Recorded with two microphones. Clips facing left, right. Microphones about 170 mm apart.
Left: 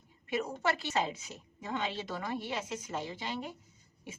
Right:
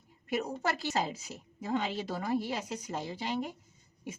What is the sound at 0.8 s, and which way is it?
A woman's voice, 35° right (ahead or behind).